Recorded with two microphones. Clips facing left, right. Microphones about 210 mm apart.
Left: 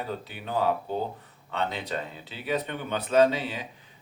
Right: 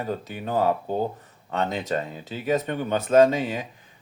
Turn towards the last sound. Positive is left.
turn(degrees=-45)  # may be behind; listen again after turning